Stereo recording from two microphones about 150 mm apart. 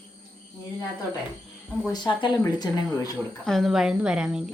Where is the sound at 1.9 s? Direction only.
30° left (ahead or behind).